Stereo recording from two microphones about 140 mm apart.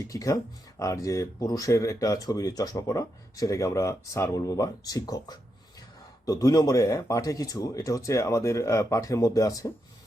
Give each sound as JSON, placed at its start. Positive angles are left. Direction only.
{"t": 0.0, "sound": "speech", "side_deg": 25}